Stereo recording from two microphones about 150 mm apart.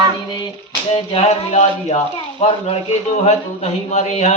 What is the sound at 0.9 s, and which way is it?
A man's voice, 40° left (ahead or behind).